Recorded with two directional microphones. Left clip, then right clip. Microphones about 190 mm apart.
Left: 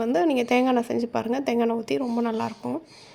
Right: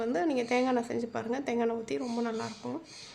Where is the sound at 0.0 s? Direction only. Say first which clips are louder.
Left 7 dB; 30° left (ahead or behind).